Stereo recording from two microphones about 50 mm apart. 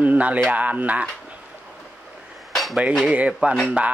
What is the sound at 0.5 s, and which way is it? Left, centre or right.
Speech, right.